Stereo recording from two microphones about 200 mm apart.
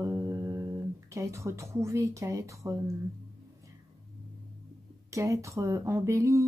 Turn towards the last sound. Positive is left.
turn(degrees=-15)  # may be behind; listen again after turning